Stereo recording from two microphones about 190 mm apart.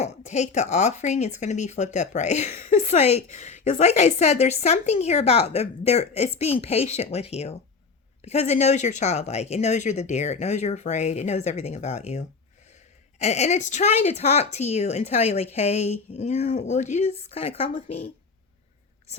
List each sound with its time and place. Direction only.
0.0 s speech: 35° left (ahead or behind)